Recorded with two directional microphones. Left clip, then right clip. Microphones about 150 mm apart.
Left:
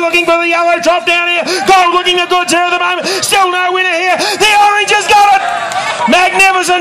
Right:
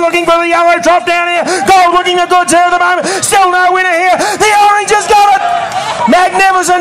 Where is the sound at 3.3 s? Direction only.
30° right (ahead or behind).